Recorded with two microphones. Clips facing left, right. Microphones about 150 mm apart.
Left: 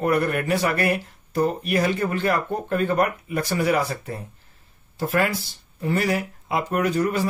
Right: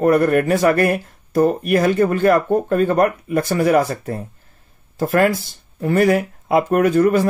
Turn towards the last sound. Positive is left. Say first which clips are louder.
# right 8 dB
turn(degrees=-50)  # may be behind; listen again after turning